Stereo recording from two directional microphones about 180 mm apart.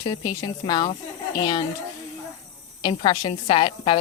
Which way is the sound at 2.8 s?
25° left (ahead or behind).